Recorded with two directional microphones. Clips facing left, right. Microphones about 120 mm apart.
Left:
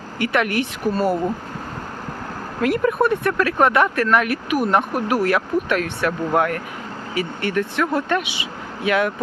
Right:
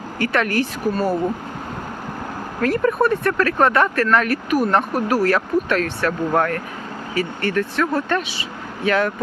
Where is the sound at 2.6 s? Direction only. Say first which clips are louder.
Even; 10° left (ahead or behind).